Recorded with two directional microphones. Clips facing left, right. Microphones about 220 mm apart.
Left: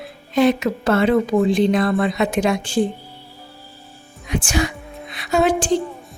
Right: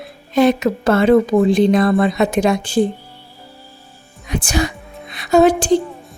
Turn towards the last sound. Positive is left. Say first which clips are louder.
# right 6 dB
turn(degrees=-40)  # may be behind; listen again after turning